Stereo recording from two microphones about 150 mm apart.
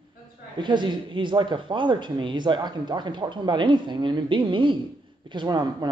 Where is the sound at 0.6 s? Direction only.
30° right (ahead or behind).